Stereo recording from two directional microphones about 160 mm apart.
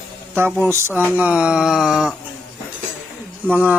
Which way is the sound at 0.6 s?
15° right (ahead or behind).